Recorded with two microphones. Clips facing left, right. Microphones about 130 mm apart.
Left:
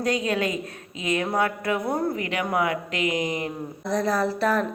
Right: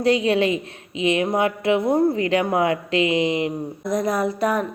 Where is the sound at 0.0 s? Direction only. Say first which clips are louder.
Right 6 dB; 30° right (ahead or behind).